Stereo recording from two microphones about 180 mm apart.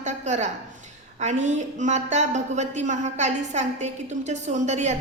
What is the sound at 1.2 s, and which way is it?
A woman's voice, 40° right (ahead or behind).